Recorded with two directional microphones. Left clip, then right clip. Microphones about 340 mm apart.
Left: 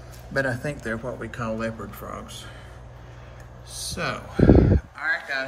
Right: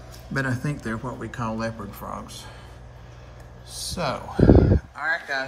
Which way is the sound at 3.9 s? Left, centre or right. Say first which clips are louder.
Right 2 dB; centre.